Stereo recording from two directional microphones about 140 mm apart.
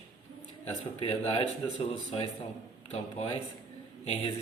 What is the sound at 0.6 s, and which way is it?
Speech, 45° left (ahead or behind).